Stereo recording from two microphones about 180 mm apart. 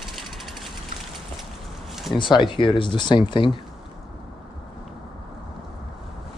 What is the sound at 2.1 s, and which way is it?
Speech, 25° left (ahead or behind).